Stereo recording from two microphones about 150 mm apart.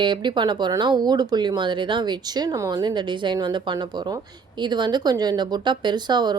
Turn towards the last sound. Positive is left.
turn(degrees=-30)  # may be behind; listen again after turning